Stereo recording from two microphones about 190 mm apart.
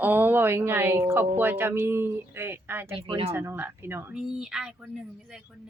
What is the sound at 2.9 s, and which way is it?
Speech, 25° right (ahead or behind).